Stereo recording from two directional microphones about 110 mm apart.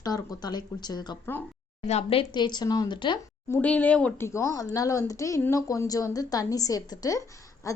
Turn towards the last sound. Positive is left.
turn(degrees=30)  # may be behind; listen again after turning